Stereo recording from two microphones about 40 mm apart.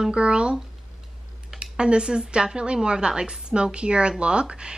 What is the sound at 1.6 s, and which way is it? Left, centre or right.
A woman's voice, right.